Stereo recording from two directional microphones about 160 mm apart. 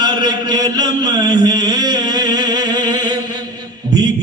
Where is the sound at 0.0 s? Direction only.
25° right (ahead or behind).